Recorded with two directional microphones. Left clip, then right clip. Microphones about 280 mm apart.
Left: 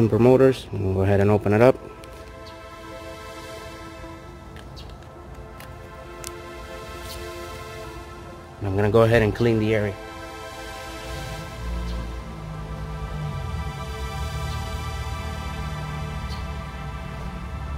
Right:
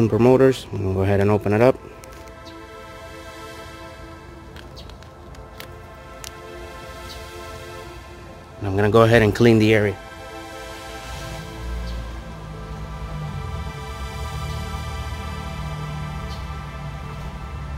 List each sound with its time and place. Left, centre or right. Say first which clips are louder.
0.0 s speech: right 1 dB; centre
8.6 s speech: right 3 dB; centre; by 9.9 s right